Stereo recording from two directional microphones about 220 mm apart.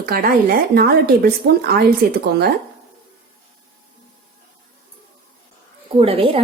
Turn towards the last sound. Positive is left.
turn(degrees=-25)  # may be behind; listen again after turning